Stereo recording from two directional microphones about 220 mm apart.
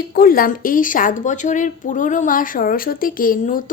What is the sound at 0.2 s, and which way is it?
A woman's voice, 40° left (ahead or behind).